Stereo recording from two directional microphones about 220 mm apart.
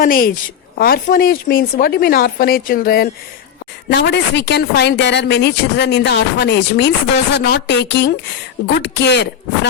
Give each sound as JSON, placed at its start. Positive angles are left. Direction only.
{"t": 0.0, "sound": "a woman's voice", "side_deg": 40}